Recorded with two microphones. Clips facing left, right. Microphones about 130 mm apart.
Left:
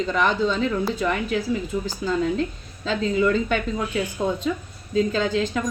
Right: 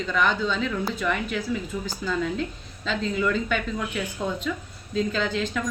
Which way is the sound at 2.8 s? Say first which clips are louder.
Left 4 dB; 40° left (ahead or behind).